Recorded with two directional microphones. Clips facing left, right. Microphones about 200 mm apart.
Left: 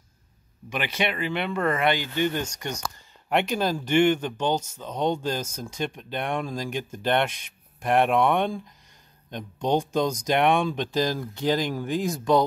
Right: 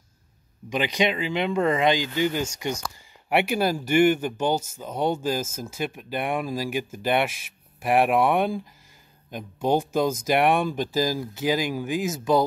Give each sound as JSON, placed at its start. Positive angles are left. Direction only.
{"t": 0.7, "sound": "speech", "side_deg": -15}